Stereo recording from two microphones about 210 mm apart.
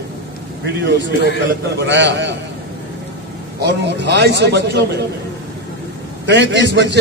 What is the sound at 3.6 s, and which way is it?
A man's voice, 55° right (ahead or behind).